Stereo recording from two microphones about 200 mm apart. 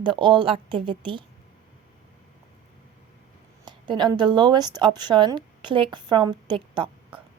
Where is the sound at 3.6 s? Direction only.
20° right (ahead or behind).